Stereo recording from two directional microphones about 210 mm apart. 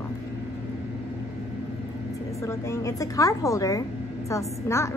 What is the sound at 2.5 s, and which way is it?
A woman's voice, 15° left (ahead or behind).